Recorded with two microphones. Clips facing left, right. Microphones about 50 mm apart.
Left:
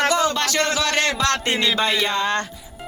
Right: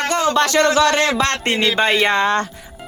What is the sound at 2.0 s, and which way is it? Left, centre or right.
Speech, right.